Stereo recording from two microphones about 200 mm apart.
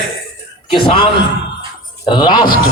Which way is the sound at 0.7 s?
25° left (ahead or behind).